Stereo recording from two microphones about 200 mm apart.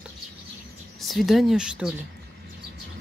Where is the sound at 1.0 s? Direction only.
Centre (ahead or behind).